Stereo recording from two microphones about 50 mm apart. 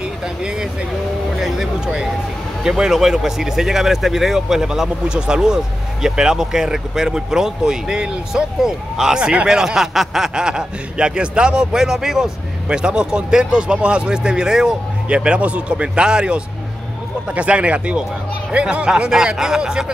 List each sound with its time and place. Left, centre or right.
2.6 s speech: centre
9.6 s speech: centre
18.9 s speech: centre